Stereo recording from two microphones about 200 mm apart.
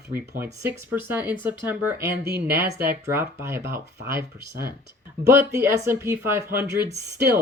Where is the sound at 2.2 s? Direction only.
55° right (ahead or behind).